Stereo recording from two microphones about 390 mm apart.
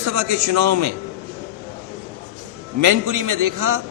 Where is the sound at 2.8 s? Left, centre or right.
Right.